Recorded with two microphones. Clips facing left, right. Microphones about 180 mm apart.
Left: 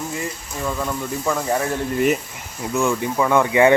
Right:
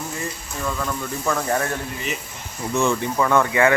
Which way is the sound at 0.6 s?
15° left (ahead or behind).